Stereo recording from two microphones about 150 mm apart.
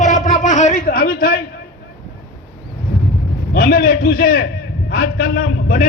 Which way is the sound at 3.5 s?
80° left.